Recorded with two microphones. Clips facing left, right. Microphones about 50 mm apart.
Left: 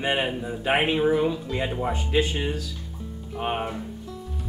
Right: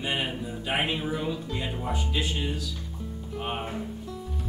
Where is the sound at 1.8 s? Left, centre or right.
Left.